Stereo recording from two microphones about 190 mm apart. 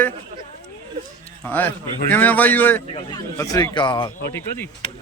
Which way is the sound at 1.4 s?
10° left (ahead or behind).